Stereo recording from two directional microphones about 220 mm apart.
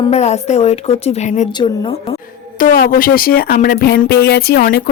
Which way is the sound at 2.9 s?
40° left (ahead or behind).